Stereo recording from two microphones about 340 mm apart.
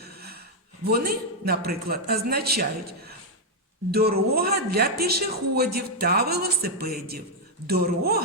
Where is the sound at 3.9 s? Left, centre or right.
Right.